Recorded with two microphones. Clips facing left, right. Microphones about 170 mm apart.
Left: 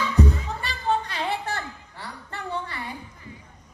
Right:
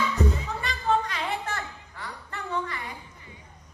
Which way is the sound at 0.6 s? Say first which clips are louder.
Right 1 dB; 30° left (ahead or behind).